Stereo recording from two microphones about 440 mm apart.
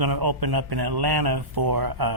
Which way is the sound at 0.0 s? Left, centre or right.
Right.